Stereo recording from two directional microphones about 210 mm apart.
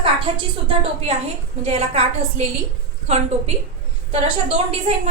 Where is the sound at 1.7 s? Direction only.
30° right (ahead or behind).